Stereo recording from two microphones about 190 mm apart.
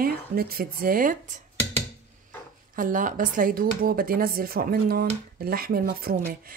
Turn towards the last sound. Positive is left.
turn(degrees=-50)  # may be behind; listen again after turning